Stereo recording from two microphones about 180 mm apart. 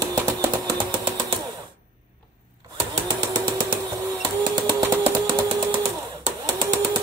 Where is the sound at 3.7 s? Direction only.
25° right (ahead or behind).